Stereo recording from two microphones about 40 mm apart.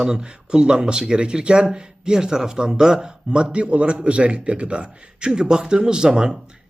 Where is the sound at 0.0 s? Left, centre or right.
Centre.